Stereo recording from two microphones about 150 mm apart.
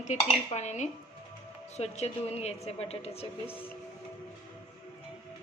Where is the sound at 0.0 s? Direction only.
50° left (ahead or behind).